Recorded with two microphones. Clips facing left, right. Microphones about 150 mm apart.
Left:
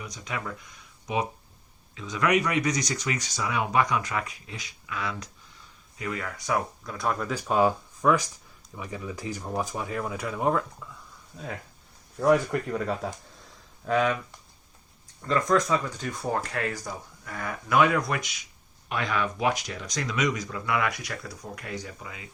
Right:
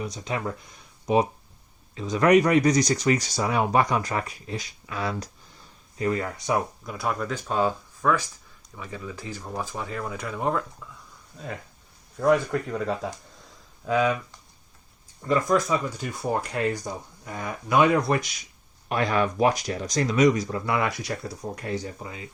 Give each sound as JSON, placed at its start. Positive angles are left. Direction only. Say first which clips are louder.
{"t": 0.0, "sound": "speech", "louder": "right 6 dB", "side_deg": -30}
{"t": 6.8, "sound": "speech", "louder": "right 1 dB", "side_deg": -5}
{"t": 7.3, "sound": "speech", "louder": "left 5 dB", "side_deg": 10}
{"t": 12.1, "sound": "speech", "louder": "right 1 dB", "side_deg": 5}
{"t": 15.2, "sound": "speech", "louder": "right 1 dB", "side_deg": -5}